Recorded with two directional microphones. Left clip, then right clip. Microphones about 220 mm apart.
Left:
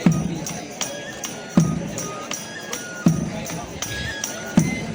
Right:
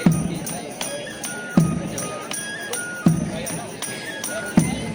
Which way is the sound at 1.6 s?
5° left (ahead or behind).